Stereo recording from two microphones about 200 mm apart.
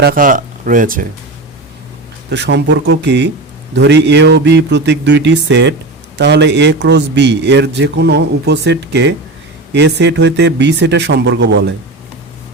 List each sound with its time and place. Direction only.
0.0 s speech: 45° right (ahead or behind)
2.3 s a man's voice: 60° right (ahead or behind)